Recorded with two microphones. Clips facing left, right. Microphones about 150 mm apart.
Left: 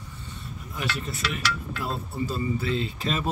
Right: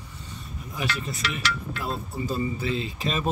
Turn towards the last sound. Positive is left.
turn(degrees=-20)  # may be behind; listen again after turning